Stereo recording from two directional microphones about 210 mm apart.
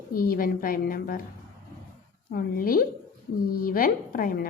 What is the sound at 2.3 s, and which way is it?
A woman's voice, 45° left (ahead or behind).